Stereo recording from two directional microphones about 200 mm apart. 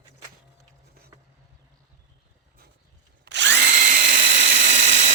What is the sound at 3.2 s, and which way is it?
Drill, 60° right (ahead or behind).